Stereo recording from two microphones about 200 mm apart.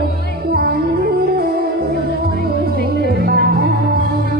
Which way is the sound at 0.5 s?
50° right (ahead or behind).